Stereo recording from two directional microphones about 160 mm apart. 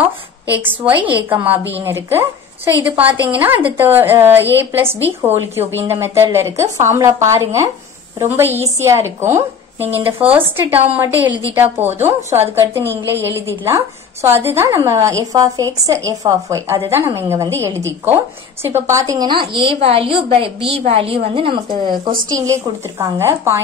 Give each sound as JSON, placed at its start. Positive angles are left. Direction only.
{"t": 0.5, "sound": "a woman's voice", "side_deg": -10}
{"t": 22.5, "sound": "a woman's voice", "side_deg": -20}